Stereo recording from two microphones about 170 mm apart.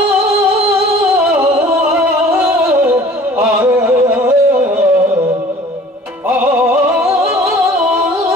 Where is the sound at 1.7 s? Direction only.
15° right (ahead or behind).